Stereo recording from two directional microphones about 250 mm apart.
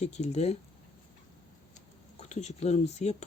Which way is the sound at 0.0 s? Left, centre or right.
Left.